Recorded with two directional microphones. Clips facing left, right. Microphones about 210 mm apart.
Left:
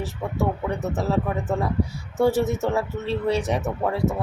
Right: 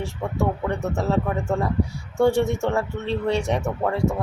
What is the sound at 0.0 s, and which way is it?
Speech, centre (ahead or behind).